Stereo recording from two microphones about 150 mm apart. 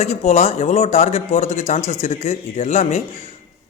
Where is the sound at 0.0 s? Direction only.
45° left (ahead or behind).